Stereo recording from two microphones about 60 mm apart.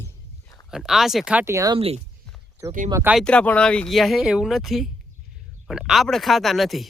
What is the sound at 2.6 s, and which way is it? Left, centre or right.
Speech, right.